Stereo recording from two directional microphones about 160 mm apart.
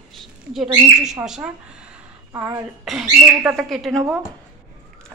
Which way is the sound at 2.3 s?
20° right (ahead or behind).